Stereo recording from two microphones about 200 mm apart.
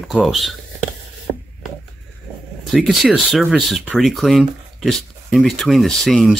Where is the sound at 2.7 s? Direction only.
5° right (ahead or behind).